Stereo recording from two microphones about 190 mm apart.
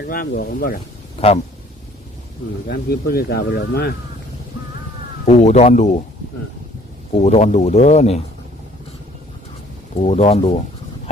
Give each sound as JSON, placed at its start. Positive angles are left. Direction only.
{"t": 0.0, "sound": "speech", "side_deg": 50}
{"t": 2.6, "sound": "speech", "side_deg": 55}
{"t": 5.2, "sound": "speech", "side_deg": 35}
{"t": 7.2, "sound": "speech", "side_deg": 35}
{"t": 9.9, "sound": "speech", "side_deg": 35}